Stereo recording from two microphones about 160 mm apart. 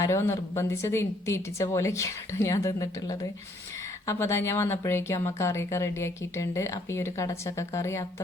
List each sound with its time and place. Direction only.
0.0 s a woman's voice: 15° left (ahead or behind)